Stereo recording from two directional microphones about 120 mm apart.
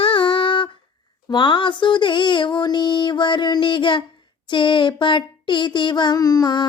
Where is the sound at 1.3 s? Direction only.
40° left (ahead or behind).